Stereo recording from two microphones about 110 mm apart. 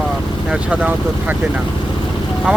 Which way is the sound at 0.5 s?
10° right (ahead or behind).